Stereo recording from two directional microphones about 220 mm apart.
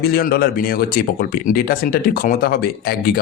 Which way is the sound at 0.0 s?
45° left (ahead or behind).